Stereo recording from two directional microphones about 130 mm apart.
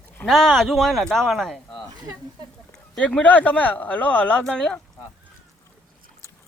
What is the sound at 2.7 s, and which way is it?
Speech, 5° left (ahead or behind).